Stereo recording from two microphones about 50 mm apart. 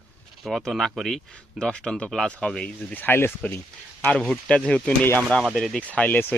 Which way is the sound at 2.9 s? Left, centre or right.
Left.